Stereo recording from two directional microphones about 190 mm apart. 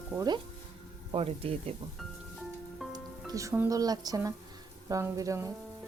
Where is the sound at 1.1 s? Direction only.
30° right (ahead or behind).